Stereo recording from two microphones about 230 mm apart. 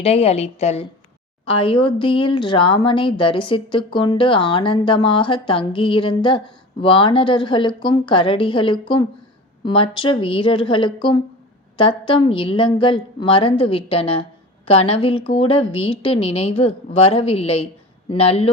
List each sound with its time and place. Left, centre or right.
0.0 s speech: left